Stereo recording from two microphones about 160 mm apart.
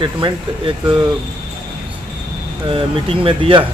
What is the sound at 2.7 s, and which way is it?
Speech, 35° right (ahead or behind).